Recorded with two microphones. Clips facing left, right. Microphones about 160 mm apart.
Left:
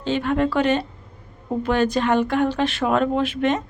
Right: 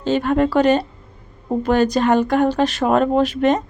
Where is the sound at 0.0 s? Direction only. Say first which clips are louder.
Right 4 dB; 40° right (ahead or behind).